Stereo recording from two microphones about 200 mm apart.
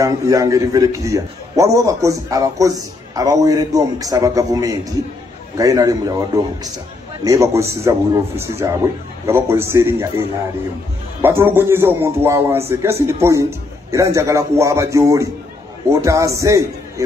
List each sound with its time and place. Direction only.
0.0 s a man's voice: 15° right (ahead or behind)